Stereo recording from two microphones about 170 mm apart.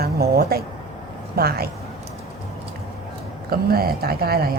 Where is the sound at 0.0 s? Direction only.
65° right (ahead or behind).